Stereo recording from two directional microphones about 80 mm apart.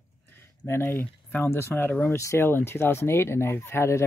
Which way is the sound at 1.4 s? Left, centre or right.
Left.